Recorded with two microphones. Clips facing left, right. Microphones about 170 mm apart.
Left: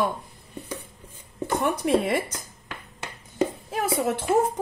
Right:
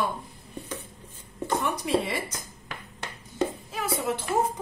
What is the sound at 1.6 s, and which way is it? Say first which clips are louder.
Speech: left 6 dB; 55° left (ahead or behind).